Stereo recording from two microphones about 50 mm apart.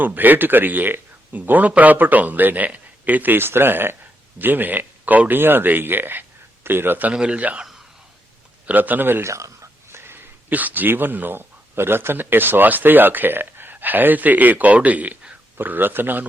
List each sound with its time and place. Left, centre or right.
0.0 s speech: right
3.3 s speech: right
5.4 s speech: right
7.1 s speech: centre
8.6 s speech: right
9.2 s whispering: right
10.5 s speech: right